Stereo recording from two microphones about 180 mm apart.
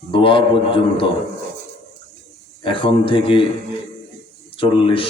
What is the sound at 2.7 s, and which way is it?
Speech, 30° left (ahead or behind).